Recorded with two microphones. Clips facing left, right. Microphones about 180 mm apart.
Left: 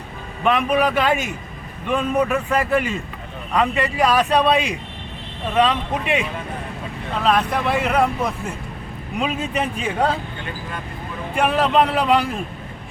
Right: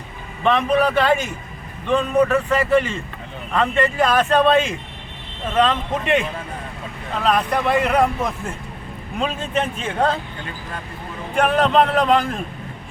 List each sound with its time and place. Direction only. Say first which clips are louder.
0.4 s a man's voice: right 1 dB; 5° left (ahead or behind)
1.9 s a man's voice: right 3 dB; 10° left (ahead or behind)
11.3 s speech: right 1 dB; 5° left (ahead or behind)